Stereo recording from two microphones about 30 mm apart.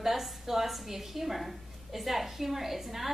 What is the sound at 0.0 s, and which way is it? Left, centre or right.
A woman's voice, centre.